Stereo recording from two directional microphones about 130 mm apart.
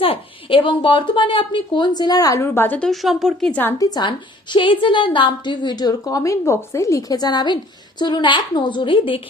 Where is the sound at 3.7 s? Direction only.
30° left (ahead or behind).